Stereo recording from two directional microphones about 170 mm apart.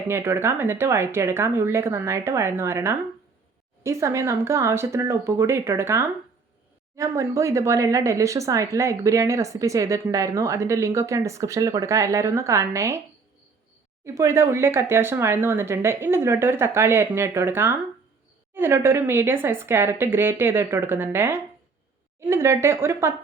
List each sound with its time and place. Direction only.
0.1 s speech: 15° right (ahead or behind)
14.0 s speech: 15° right (ahead or behind)